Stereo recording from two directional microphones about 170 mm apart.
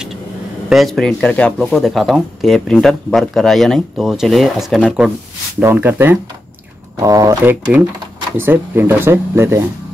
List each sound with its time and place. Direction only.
0.7 s speech: centre (ahead or behind); by 9.7 s 15° right (ahead or behind)